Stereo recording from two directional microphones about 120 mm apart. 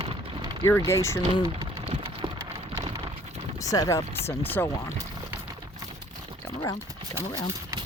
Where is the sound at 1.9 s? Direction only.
45° right (ahead or behind).